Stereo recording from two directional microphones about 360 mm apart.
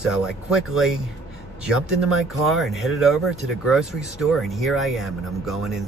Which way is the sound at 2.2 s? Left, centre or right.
Centre.